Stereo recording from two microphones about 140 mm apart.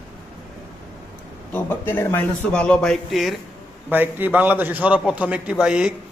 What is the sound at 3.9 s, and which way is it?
A man's voice, 15° right (ahead or behind).